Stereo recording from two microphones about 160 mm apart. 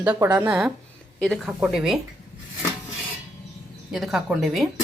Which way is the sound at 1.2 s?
Centre (ahead or behind).